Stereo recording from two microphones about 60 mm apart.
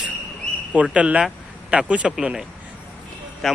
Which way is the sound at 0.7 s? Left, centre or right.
Right.